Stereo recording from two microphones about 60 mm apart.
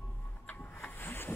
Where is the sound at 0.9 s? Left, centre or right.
Left.